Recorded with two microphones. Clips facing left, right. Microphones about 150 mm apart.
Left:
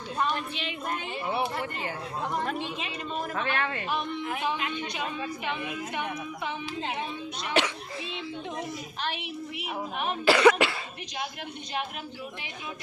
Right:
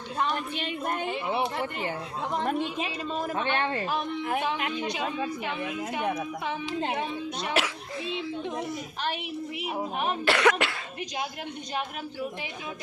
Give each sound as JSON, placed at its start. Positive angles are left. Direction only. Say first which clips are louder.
{"t": 0.5, "sound": "speech", "louder": "right 3 dB", "side_deg": -50}
{"t": 1.3, "sound": "speech", "louder": "left 1 dB", "side_deg": -20}
{"t": 2.5, "sound": "speech", "louder": "right 4 dB", "side_deg": -45}
{"t": 3.3, "sound": "speech", "louder": "right 2 dB", "side_deg": -30}
{"t": 4.4, "sound": "speech", "louder": "right 1 dB", "side_deg": -60}
{"t": 7.5, "sound": "a child's voice", "louder": "left 4 dB", "side_deg": -5}
{"t": 9.0, "sound": "speech", "louder": "right 3 dB", "side_deg": -45}
{"t": 10.2, "sound": "cough", "louder": "left 5 dB", "side_deg": 0}